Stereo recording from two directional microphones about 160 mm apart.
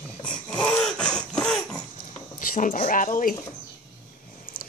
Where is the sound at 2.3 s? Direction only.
60° left (ahead or behind).